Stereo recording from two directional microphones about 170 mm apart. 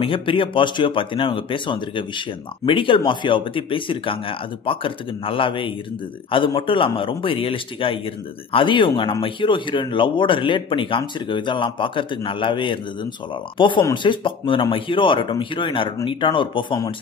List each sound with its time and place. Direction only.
0.0 s speech: 30° left (ahead or behind)